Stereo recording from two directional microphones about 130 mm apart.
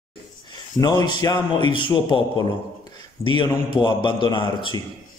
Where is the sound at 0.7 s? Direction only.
30° left (ahead or behind).